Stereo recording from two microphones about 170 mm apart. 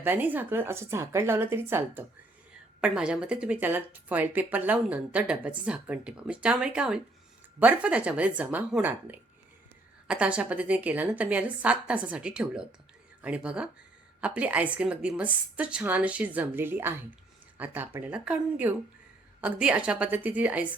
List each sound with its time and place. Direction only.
0.0 s speech: 10° right (ahead or behind)